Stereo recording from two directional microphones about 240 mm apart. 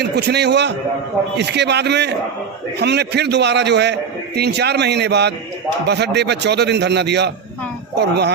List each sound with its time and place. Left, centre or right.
0.0 s a man's voice: right